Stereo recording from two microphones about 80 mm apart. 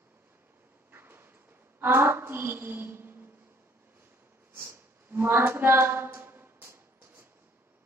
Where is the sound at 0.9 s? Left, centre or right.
Right.